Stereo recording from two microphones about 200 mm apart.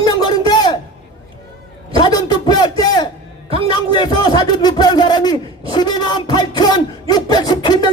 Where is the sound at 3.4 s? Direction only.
30° right (ahead or behind).